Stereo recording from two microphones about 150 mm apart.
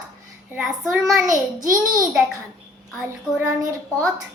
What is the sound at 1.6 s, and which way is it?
Speech, 65° right (ahead or behind).